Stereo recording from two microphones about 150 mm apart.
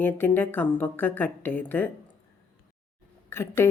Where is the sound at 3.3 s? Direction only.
15° left (ahead or behind).